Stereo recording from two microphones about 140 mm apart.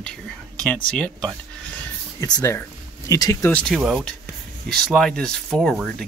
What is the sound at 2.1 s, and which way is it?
Speech, 25° left (ahead or behind).